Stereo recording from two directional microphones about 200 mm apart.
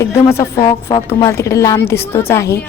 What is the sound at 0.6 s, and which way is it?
A woman's voice, 25° left (ahead or behind).